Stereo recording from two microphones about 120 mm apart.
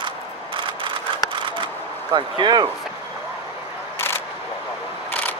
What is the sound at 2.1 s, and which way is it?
Speech, 40° right (ahead or behind).